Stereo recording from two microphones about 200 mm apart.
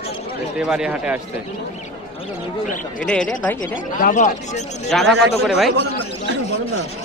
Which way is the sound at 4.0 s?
40° left (ahead or behind).